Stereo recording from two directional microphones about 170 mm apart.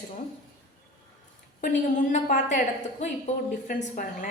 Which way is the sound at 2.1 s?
45° left (ahead or behind).